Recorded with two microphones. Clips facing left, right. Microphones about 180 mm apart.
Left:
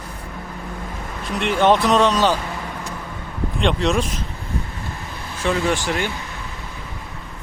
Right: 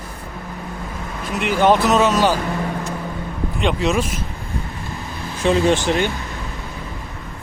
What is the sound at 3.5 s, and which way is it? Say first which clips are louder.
Speech: even; 5° right (ahead or behind).